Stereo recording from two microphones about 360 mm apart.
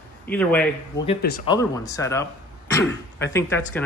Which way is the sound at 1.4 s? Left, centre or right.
Centre.